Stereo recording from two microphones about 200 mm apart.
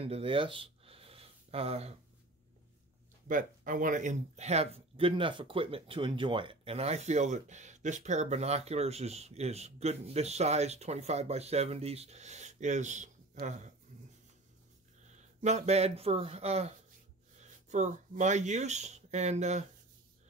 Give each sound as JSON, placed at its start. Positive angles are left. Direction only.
{"t": 0.0, "sound": "a sound", "side_deg": -30}
{"t": 3.3, "sound": "speech", "side_deg": -40}
{"t": 15.0, "sound": "speech", "side_deg": -35}